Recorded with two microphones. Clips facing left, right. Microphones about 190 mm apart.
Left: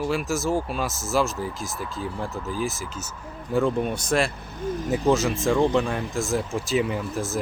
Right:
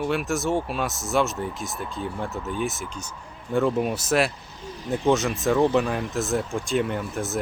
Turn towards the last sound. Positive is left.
turn(degrees=0)  # may be behind; listen again after turning